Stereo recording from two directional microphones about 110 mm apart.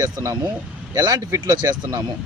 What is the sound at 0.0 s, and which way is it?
Speech, 30° right (ahead or behind).